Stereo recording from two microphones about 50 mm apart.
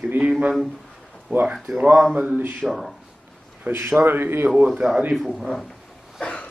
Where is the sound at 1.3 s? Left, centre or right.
Right.